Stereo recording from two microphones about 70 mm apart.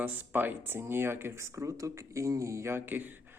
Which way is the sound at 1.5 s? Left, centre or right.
Right.